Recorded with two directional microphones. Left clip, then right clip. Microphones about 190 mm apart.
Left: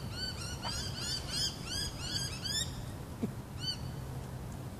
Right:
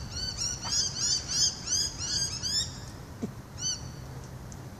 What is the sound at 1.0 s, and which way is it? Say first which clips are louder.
Bird: right 8 dB; 45° right (ahead or behind).